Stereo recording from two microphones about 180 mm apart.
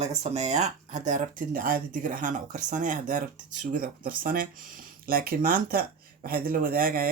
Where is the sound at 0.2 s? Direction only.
40° right (ahead or behind).